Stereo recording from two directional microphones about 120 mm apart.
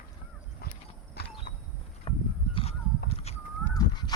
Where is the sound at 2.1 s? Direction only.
50° left (ahead or behind).